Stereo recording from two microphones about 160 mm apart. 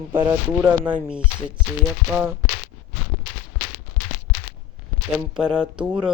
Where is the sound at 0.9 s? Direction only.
5° right (ahead or behind).